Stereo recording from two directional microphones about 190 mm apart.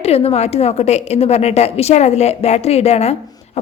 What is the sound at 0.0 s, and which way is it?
A woman's voice, 30° left (ahead or behind).